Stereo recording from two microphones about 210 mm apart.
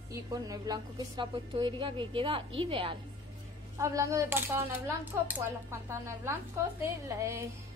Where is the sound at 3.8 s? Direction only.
15° right (ahead or behind).